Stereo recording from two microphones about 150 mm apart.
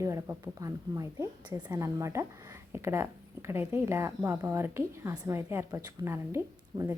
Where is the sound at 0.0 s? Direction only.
20° right (ahead or behind).